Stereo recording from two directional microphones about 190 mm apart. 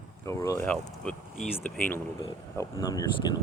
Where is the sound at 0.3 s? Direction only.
15° left (ahead or behind).